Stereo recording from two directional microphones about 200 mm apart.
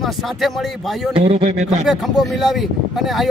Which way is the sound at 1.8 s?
Centre (ahead or behind).